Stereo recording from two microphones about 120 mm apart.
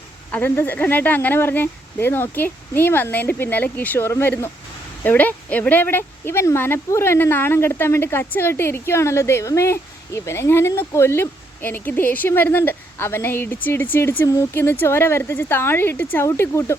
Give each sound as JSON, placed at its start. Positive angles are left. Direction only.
{"t": 0.3, "sound": "speech", "side_deg": 15}